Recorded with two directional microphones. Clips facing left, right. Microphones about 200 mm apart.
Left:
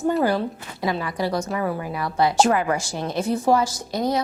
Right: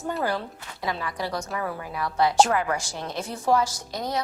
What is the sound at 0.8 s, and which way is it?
Speech, 10° left (ahead or behind).